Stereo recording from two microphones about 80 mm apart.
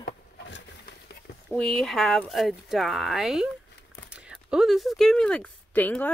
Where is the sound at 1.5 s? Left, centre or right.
Centre.